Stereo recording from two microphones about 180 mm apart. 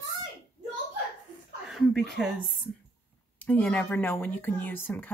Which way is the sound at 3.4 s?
10° left (ahead or behind).